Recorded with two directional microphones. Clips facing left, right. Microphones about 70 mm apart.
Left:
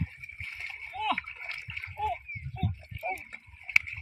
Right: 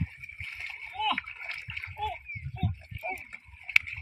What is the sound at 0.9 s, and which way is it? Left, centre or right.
Splash, left.